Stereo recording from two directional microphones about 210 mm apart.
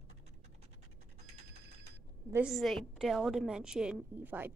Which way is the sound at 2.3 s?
Centre (ahead or behind).